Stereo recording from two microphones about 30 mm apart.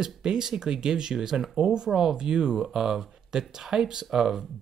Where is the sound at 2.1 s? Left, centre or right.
Right.